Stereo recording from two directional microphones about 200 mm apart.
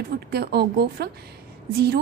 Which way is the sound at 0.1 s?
50° right (ahead or behind).